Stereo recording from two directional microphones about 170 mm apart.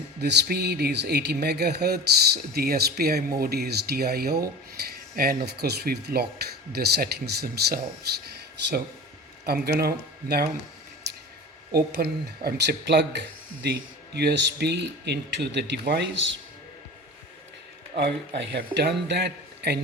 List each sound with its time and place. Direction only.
0.2 s speech: 75° right (ahead or behind)
8.3 s a sound: 75° right (ahead or behind)
9.5 s speech: 65° right (ahead or behind)
11.7 s speech: 65° right (ahead or behind); by 16.4 s 85° right
17.9 s speech: 75° right (ahead or behind)